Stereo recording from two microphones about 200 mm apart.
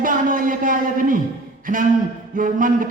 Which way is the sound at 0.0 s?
40° right (ahead or behind).